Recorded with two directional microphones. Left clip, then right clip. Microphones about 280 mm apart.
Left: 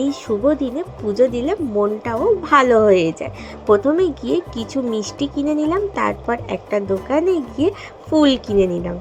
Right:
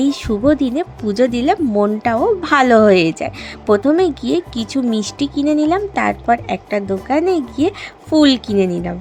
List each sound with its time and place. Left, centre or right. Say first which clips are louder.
0.0 s speech: right 2 dB; right